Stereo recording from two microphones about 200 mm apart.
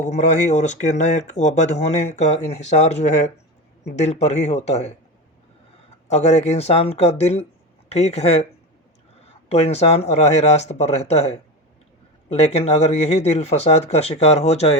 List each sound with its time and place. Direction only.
0.0 s speech: 35° left (ahead or behind)
6.1 s speech: 35° left (ahead or behind)
9.5 s speech: 30° left (ahead or behind)